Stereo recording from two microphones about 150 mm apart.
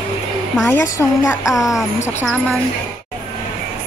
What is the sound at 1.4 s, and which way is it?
Speech, centre (ahead or behind).